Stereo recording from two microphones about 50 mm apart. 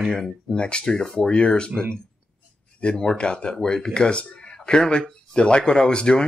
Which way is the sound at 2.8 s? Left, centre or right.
Centre.